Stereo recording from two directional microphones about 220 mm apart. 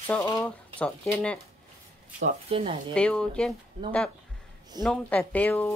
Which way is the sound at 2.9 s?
5° left (ahead or behind).